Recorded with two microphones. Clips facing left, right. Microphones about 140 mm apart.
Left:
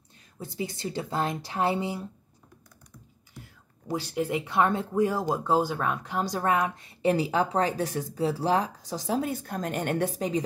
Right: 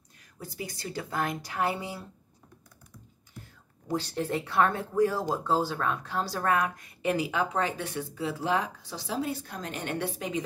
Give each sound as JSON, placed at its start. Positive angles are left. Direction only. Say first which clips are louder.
{"t": 0.4, "sound": "speech", "louder": "left 5 dB", "side_deg": 25}
{"t": 3.8, "sound": "speech", "louder": "left 1 dB", "side_deg": 10}